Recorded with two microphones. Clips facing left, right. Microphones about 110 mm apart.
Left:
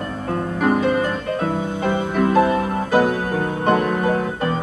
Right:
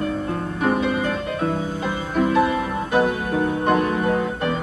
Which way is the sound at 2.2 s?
35° left (ahead or behind).